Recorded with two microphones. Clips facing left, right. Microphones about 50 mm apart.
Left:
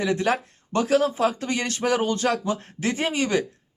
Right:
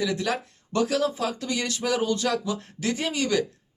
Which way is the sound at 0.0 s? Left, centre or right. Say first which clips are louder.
Left 4 dB; left.